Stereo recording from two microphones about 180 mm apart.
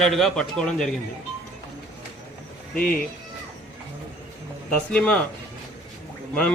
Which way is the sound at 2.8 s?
55° left (ahead or behind).